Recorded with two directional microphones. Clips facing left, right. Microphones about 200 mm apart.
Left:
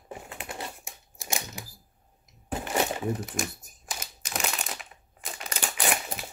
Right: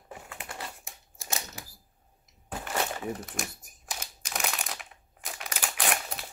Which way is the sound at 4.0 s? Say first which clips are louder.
Left 2 dB; 5° left (ahead or behind).